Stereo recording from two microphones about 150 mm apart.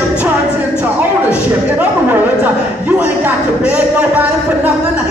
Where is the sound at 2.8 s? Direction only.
10° right (ahead or behind).